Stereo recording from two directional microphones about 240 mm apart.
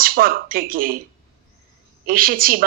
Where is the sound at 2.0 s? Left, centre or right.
Right.